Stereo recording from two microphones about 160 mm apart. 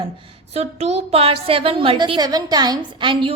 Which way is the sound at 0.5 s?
40° right (ahead or behind).